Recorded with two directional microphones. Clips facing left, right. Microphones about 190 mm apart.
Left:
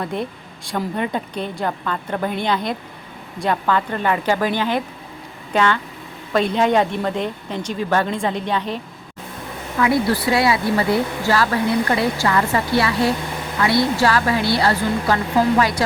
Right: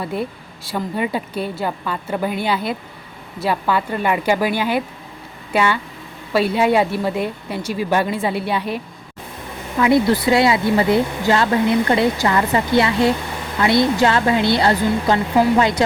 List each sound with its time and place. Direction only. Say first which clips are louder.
0.0 s a woman's voice: right 1 dB; 5° right (ahead or behind)
9.7 s speech: right 3 dB; 20° right (ahead or behind)